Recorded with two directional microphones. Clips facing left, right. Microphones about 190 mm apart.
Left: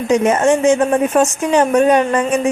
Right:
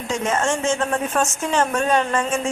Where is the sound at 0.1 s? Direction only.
20° left (ahead or behind).